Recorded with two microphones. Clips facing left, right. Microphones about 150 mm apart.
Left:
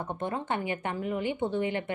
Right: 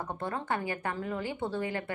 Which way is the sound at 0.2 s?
20° left (ahead or behind).